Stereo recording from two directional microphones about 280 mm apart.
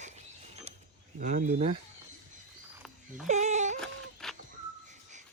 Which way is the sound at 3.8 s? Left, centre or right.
Centre.